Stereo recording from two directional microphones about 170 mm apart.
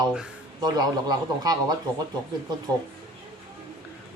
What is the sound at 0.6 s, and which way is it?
Speech, 25° right (ahead or behind).